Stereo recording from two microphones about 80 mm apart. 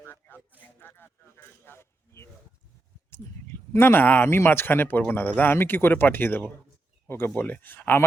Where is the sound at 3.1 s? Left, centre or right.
Left.